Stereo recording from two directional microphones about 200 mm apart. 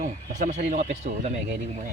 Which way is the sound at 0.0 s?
40° right (ahead or behind).